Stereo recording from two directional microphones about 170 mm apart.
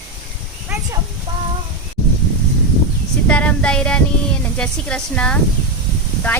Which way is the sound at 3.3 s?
5° left (ahead or behind).